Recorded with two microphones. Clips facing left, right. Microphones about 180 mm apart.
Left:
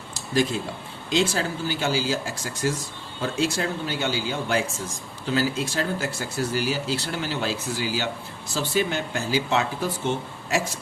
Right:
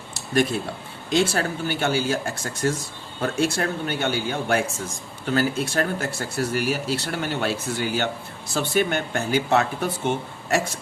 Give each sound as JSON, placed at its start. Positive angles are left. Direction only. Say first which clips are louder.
{"t": 1.3, "sound": "speech", "louder": "right 2 dB", "side_deg": -60}